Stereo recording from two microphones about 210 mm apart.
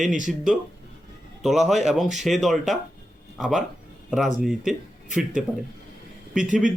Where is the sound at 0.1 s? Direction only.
35° right (ahead or behind).